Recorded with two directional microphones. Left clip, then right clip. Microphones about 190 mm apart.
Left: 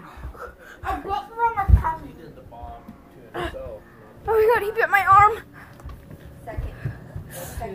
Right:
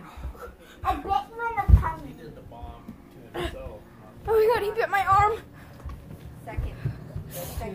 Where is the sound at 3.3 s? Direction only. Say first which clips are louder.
Left 3 dB; 20° left (ahead or behind).